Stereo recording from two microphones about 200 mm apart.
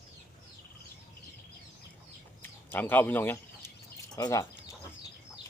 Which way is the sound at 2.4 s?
10° left (ahead or behind).